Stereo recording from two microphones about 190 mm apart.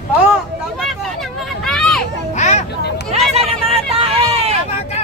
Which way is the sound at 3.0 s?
35° right (ahead or behind).